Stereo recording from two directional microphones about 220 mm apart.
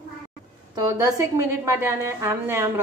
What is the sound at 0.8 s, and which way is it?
A woman's voice, 15° right (ahead or behind).